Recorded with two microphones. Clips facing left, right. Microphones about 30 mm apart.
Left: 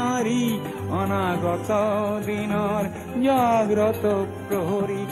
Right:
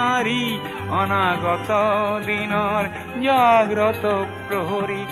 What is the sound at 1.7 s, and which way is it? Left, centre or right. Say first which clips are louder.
Music: right 4 dB; right.